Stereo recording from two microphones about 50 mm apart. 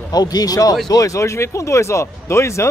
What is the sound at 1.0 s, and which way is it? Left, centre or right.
Speech, left.